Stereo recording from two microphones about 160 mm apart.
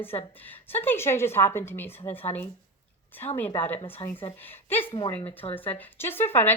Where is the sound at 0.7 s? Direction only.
15° left (ahead or behind).